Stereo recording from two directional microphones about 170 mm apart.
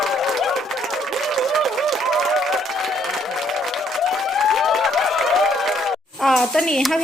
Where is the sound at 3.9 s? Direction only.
Centre (ahead or behind).